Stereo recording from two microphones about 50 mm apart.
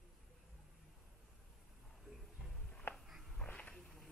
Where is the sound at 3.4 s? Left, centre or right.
Left.